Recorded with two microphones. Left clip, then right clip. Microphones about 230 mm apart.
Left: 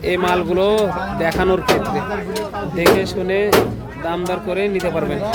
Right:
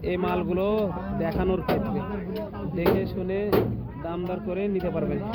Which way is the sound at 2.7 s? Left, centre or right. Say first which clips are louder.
Left 10 dB; left.